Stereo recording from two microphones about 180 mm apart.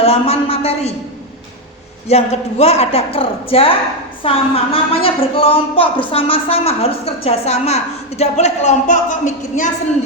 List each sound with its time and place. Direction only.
0.0 s a woman's voice: 35° left (ahead or behind)
2.0 s a woman's voice: 35° left (ahead or behind)